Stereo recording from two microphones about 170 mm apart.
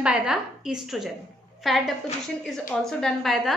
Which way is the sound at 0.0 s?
5° right (ahead or behind).